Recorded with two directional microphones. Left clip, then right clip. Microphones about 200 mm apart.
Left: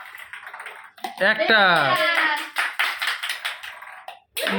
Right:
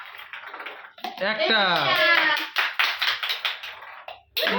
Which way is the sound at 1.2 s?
20° left (ahead or behind).